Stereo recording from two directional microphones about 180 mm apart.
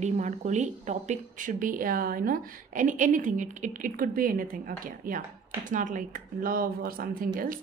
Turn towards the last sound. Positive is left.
turn(degrees=-55)  # may be behind; listen again after turning